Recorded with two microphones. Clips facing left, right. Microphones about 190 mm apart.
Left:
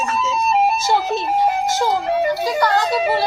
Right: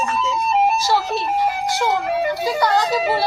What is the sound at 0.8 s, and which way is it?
Speech, 20° left (ahead or behind).